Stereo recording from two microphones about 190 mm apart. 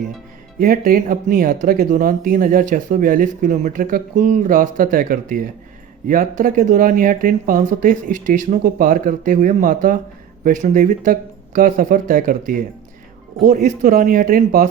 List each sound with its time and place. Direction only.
0.6 s speech: 50° right (ahead or behind)